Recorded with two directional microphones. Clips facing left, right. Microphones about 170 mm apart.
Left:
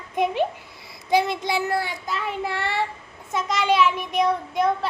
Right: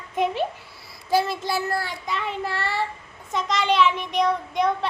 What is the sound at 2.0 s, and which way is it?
Child singing, centre (ahead or behind).